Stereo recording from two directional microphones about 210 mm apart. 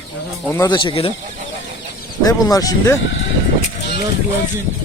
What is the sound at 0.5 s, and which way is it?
Speech, 20° left (ahead or behind).